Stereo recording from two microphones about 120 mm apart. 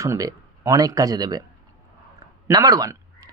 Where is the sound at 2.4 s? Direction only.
30° right (ahead or behind).